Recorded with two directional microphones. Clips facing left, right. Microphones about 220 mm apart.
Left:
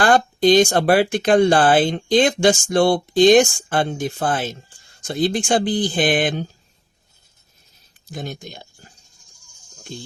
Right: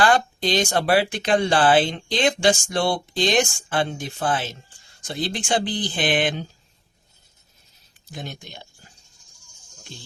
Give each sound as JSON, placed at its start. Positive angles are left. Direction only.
{"t": 0.0, "sound": "speech", "side_deg": 50}
{"t": 8.1, "sound": "speech", "side_deg": 45}
{"t": 9.9, "sound": "speech", "side_deg": 45}